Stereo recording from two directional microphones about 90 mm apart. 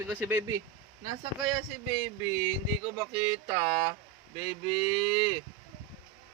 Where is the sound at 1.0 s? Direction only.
60° right (ahead or behind).